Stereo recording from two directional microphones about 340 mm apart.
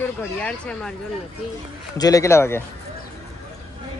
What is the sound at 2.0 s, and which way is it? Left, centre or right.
Speech, centre.